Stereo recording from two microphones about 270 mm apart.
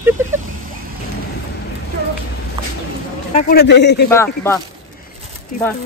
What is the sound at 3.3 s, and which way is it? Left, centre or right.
Speech, left.